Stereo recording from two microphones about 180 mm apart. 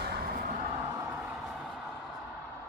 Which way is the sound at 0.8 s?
15° right (ahead or behind).